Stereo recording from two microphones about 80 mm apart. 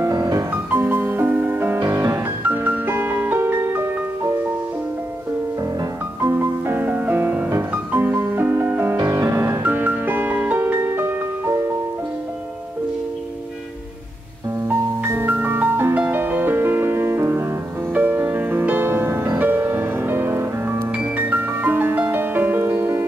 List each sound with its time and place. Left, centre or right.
0.1 s music: right
0.7 s music: right
1.8 s music: right
2.4 s music: right
6.2 s music: right
14.7 s music: right